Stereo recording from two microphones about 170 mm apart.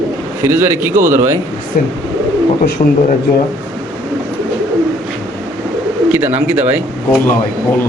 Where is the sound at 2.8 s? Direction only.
35° left (ahead or behind).